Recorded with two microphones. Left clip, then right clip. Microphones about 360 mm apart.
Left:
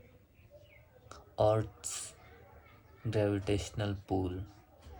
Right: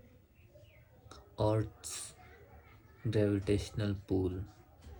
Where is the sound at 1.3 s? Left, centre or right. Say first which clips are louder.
Left 4 dB; left.